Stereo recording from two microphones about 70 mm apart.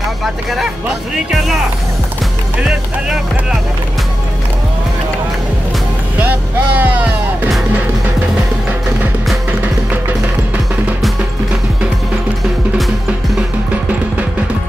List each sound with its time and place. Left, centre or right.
6.1 s speech: right